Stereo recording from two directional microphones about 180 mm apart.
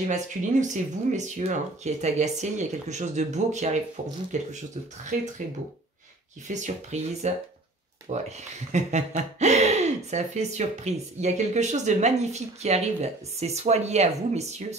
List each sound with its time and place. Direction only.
0.1 s speech: 45° right (ahead or behind)
6.4 s speech: 40° right (ahead or behind)